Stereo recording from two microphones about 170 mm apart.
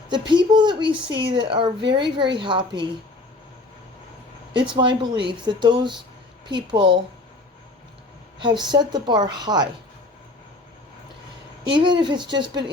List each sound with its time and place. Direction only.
0.1 s speech: 25° right (ahead or behind)
4.7 s speech: 25° right (ahead or behind)
8.4 s a woman's voice: 25° right (ahead or behind)
11.6 s speech: 30° right (ahead or behind)